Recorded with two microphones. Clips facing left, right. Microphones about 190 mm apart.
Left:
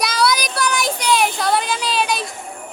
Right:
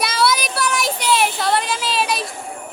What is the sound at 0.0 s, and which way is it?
Child singing, centre (ahead or behind).